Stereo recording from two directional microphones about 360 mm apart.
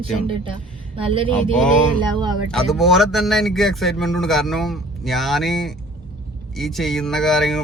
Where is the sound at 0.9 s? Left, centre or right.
Centre.